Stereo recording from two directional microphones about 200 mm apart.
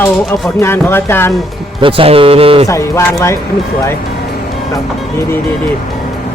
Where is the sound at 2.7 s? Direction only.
15° left (ahead or behind).